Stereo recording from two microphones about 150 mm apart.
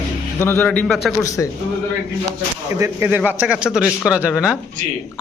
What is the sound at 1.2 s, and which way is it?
Speech, 20° left (ahead or behind).